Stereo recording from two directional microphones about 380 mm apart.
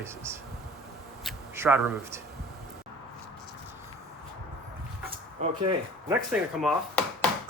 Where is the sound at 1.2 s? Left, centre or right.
Centre.